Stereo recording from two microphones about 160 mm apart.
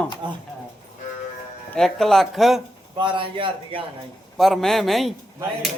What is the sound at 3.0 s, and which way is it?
Speech, 30° right (ahead or behind).